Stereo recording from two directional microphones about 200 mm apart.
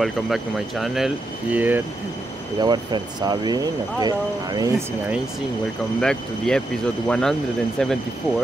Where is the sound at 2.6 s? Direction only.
20° right (ahead or behind).